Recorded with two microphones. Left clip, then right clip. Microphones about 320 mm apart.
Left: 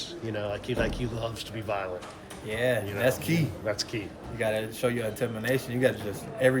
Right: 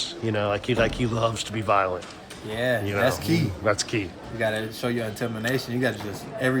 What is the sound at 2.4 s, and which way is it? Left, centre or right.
Speech, centre.